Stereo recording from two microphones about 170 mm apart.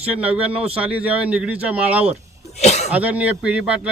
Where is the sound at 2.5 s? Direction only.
40° left (ahead or behind).